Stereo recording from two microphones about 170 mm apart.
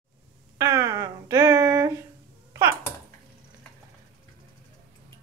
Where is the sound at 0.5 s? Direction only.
20° right (ahead or behind).